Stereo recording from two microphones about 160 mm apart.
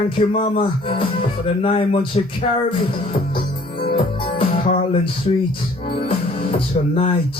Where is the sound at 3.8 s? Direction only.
35° left (ahead or behind).